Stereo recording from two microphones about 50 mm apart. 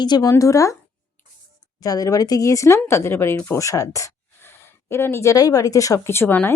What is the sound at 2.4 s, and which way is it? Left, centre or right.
Speech, left.